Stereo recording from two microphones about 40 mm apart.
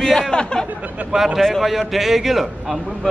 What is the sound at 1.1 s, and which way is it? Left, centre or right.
Speech, centre.